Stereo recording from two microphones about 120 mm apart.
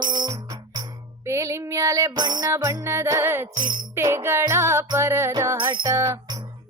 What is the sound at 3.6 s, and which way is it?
Music, 40° right (ahead or behind).